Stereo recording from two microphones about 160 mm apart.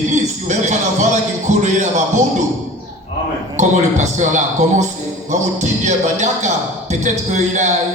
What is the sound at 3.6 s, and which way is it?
A man's voice, 50° right (ahead or behind).